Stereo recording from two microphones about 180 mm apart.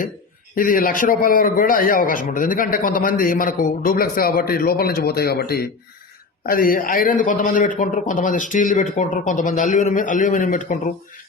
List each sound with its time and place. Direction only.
0.5 s a man's voice: 50° left (ahead or behind)